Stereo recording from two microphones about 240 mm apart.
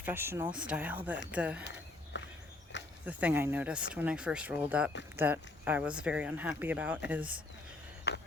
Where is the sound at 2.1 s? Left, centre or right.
Left.